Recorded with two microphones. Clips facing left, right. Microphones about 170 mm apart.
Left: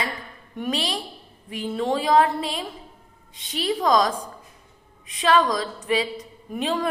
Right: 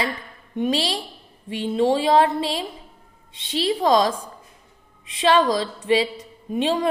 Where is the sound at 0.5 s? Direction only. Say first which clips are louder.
Right 4 dB; 25° right (ahead or behind).